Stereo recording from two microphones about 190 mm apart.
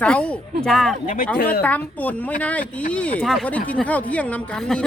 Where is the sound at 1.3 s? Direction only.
50° left (ahead or behind).